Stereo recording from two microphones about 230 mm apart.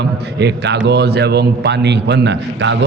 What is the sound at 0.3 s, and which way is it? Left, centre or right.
A man's voice, right.